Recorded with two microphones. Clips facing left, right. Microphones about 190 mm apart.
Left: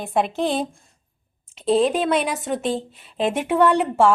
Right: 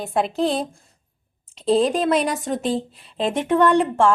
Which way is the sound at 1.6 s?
Centre (ahead or behind).